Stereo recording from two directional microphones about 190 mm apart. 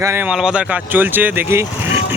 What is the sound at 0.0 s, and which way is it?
Speech, 10° right (ahead or behind).